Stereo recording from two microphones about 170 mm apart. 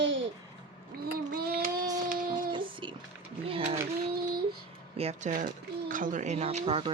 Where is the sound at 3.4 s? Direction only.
35° right (ahead or behind).